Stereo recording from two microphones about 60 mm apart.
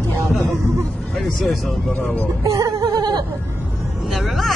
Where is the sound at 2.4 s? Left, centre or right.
Right.